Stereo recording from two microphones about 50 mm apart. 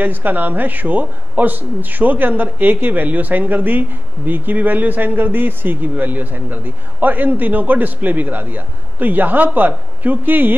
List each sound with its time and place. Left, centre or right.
0.0 s speech: right